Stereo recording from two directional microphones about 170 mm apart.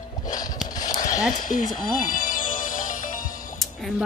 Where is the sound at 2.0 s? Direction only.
50° left (ahead or behind).